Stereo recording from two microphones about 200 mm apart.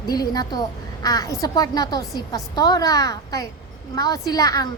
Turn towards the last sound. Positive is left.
turn(degrees=20)  # may be behind; listen again after turning